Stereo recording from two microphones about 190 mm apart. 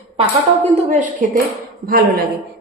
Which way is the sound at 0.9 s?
40° right (ahead or behind).